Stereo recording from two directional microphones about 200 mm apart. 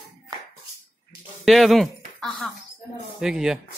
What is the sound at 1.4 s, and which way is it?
Speech, centre (ahead or behind).